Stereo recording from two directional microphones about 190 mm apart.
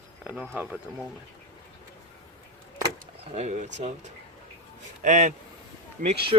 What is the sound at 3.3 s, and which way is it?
Speech, 40° right (ahead or behind).